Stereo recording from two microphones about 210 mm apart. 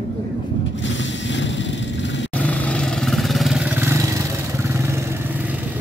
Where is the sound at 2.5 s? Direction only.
5° left (ahead or behind); by 5.4 s 15° right (ahead or behind).